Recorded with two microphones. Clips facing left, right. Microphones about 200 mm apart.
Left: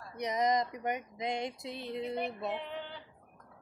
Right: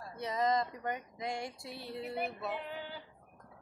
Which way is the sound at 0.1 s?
20° left (ahead or behind).